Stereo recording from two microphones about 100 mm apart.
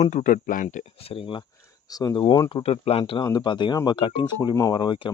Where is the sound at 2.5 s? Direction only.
80° left.